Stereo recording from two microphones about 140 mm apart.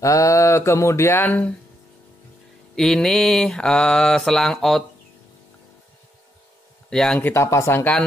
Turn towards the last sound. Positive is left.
turn(degrees=15)  # may be behind; listen again after turning